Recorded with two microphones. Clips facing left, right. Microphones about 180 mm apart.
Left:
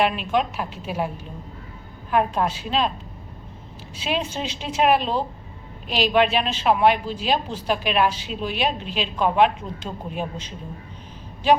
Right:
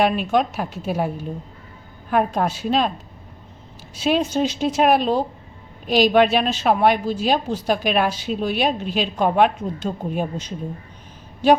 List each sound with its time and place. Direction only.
0.0 s a woman's voice: 45° right (ahead or behind)
3.9 s a woman's voice: 45° right (ahead or behind)